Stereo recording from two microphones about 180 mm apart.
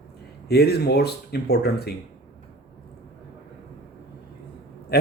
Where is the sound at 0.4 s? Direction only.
60° left (ahead or behind).